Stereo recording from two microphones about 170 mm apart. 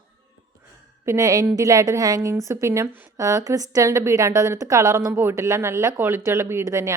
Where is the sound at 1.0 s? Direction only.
20° right (ahead or behind).